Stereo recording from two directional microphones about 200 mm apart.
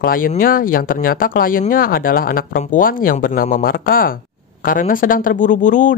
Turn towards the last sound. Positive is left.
turn(degrees=40)  # may be behind; listen again after turning